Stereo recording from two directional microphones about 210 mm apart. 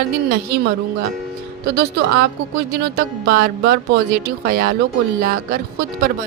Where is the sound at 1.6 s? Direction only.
50° right (ahead or behind).